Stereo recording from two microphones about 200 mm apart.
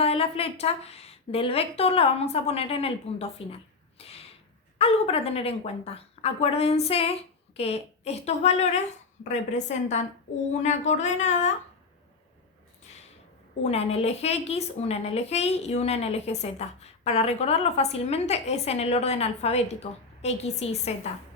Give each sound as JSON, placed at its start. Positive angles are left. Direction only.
{"t": 0.0, "sound": "a woman's voice", "side_deg": 30}
{"t": 3.9, "sound": "a sound", "side_deg": 30}
{"t": 4.8, "sound": "speech", "side_deg": 30}
{"t": 13.7, "sound": "speech", "side_deg": 30}